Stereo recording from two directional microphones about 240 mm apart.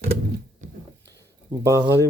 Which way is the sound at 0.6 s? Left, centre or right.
Right.